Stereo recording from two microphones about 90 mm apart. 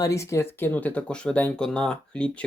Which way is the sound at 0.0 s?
35° left (ahead or behind).